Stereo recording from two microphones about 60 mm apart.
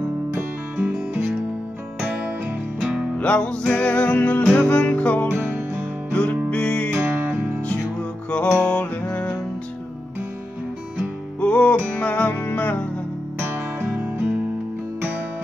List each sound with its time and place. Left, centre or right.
0.7 s music: right
2.8 s music: centre
3.2 s music: centre
5.3 s music: right
6.1 s music: centre
7.0 s music: right
8.5 s music: left
11.4 s music: centre
13.4 s music: right
13.8 s music: right